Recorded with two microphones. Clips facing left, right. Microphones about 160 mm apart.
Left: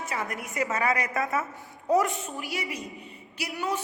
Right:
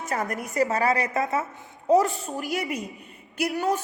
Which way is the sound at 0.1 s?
45° right (ahead or behind).